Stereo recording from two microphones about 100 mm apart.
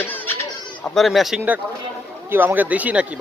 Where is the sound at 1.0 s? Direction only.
Centre (ahead or behind).